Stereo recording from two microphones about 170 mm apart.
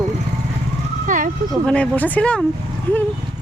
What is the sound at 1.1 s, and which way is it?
Speech, 50° right (ahead or behind).